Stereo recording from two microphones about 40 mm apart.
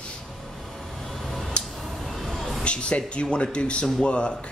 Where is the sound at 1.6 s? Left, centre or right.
Left.